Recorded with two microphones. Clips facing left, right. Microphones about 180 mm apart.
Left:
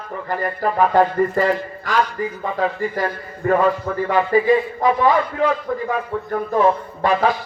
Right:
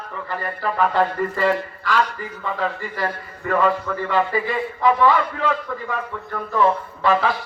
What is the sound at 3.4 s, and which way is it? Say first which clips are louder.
Music: left 3 dB; 40° left (ahead or behind).